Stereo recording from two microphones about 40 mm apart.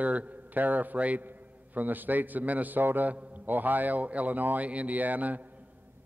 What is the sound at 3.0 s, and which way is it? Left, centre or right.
Speech, right.